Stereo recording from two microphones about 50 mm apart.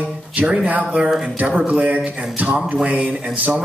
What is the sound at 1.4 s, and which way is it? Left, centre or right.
Speech, right.